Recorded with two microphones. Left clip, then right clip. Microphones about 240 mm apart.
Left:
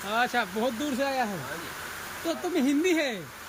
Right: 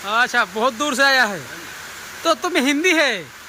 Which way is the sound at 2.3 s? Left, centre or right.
Centre.